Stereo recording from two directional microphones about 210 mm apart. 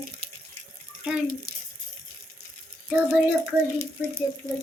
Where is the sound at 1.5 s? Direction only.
45° right (ahead or behind).